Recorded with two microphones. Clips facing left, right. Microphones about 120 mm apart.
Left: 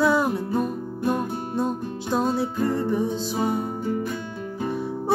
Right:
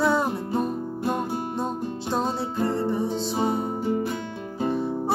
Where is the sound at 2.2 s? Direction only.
30° right (ahead or behind).